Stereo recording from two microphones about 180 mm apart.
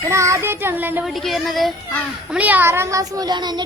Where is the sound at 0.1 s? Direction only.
15° right (ahead or behind).